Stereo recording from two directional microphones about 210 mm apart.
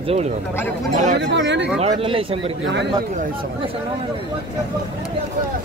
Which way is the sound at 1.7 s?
25° right (ahead or behind).